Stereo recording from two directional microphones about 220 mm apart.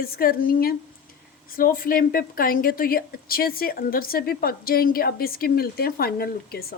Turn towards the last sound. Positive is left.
turn(degrees=45)  # may be behind; listen again after turning